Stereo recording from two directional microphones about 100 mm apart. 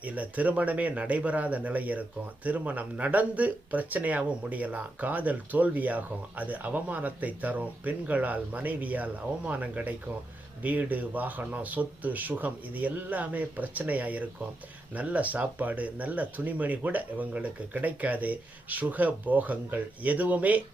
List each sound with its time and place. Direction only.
0.0 s speech: 15° right (ahead or behind)